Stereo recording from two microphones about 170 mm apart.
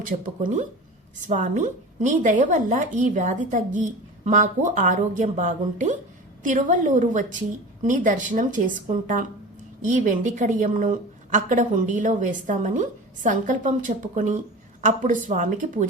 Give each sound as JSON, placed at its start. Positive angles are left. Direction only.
{"t": 0.0, "sound": "a woman's voice", "side_deg": -50}